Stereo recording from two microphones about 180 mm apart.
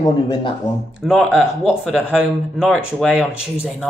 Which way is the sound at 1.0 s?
Centre (ahead or behind).